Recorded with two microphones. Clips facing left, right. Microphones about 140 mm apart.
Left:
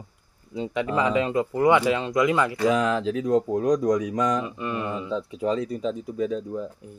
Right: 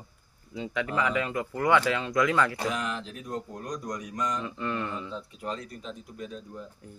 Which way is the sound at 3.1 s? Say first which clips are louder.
Left 17 dB; 90° left.